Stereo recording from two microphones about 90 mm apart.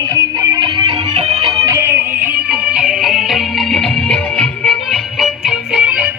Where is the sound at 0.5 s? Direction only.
60° right (ahead or behind).